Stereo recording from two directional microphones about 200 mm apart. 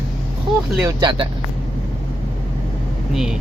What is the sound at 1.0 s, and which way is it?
Speech, 25° right (ahead or behind).